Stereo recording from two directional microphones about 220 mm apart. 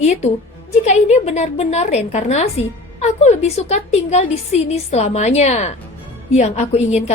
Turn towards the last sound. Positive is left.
turn(degrees=30)  # may be behind; listen again after turning